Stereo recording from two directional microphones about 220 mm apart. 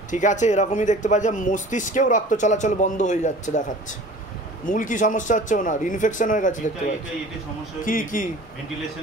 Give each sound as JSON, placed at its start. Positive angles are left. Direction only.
{"t": 0.1, "sound": "speech", "side_deg": 35}
{"t": 7.8, "sound": "speech", "side_deg": 40}